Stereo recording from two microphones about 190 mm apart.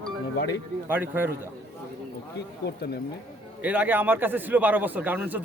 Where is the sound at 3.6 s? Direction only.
10° right (ahead or behind).